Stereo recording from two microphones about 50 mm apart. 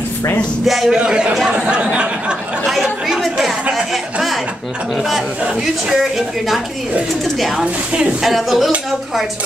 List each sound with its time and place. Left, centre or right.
0.7 s speech: centre
1.0 s a sound: centre
2.6 s chatter: centre
3.7 s speech: centre
5.9 s a woman's voice: centre
7.6 s a sound: right
8.2 s speech: centre